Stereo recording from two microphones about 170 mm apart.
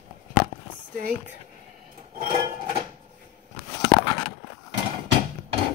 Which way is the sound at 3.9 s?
30° left (ahead or behind).